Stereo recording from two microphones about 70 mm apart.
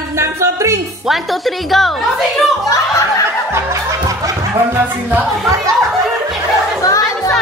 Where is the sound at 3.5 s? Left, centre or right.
Right.